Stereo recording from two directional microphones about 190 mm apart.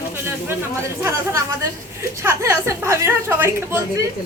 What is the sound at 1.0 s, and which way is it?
A woman's voice, 15° right (ahead or behind).